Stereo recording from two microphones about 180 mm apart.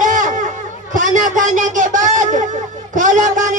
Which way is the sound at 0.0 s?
45° right (ahead or behind).